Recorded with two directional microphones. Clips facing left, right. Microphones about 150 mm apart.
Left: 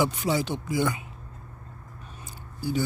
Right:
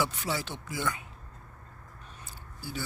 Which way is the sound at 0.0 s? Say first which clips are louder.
Left 7 dB; 15° left (ahead or behind).